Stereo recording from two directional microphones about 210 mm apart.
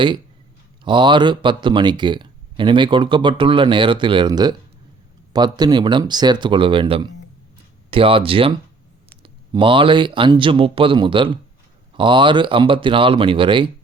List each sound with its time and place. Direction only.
0.9 s speech: 20° right (ahead or behind)